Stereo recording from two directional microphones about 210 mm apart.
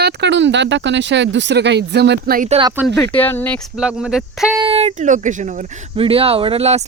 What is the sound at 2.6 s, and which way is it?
Speech, 10° right (ahead or behind).